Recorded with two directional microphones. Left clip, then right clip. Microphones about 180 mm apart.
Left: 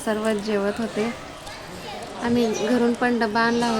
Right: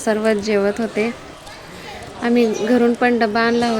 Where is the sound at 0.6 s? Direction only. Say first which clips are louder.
Right 6 dB; centre (ahead or behind).